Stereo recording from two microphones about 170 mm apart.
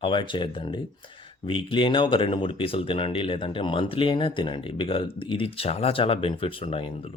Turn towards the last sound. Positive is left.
turn(degrees=35)  # may be behind; listen again after turning